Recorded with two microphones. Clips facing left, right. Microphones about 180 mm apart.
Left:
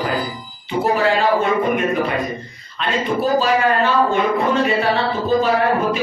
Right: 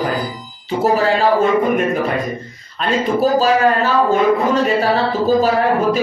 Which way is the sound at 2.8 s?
40° right (ahead or behind).